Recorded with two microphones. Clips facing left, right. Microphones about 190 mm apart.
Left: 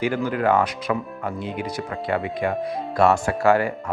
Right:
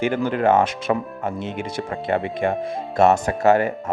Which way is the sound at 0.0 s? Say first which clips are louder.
Right 2 dB; 25° right (ahead or behind).